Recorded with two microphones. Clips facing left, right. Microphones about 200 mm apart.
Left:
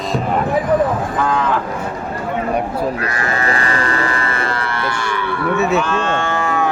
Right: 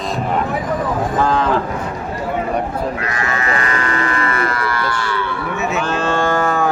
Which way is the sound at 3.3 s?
35° left (ahead or behind).